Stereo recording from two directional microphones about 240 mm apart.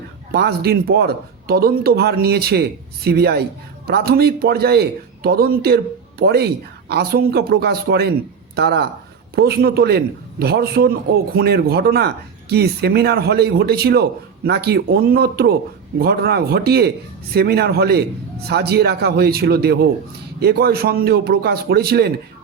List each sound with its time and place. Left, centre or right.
0.3 s a man's voice: right